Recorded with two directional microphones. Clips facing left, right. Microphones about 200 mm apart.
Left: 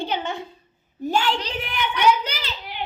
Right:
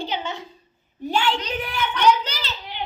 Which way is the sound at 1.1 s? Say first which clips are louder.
Even; 35° left (ahead or behind).